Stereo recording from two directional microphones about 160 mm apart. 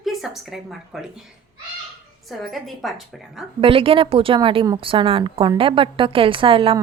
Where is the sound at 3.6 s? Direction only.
35° right (ahead or behind).